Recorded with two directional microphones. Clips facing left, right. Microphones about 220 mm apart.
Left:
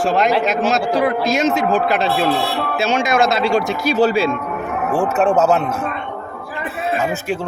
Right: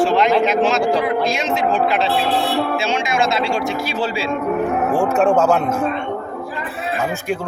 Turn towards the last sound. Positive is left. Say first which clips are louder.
# even
turn(degrees=5)  # may be behind; listen again after turning